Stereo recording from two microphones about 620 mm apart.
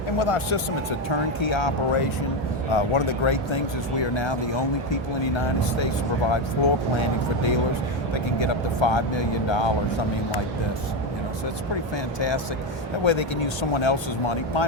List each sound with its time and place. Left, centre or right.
0.2 s speech: left
13.1 s speech: left